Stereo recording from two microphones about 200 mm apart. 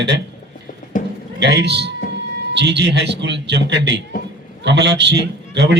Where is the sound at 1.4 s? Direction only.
60° right (ahead or behind).